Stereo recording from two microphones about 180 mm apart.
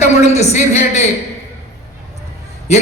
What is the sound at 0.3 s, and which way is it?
Speech, 40° left (ahead or behind).